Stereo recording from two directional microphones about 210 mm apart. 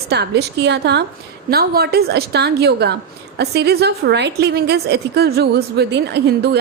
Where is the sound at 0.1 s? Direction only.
50° right (ahead or behind).